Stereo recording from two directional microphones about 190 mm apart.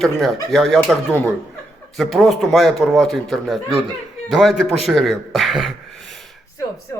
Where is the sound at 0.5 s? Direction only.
Centre (ahead or behind).